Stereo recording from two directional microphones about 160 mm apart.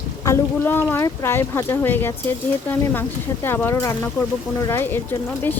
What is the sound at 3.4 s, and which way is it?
A woman's voice, 15° left (ahead or behind).